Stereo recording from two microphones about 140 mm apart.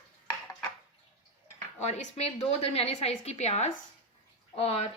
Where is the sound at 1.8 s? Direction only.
50° left (ahead or behind).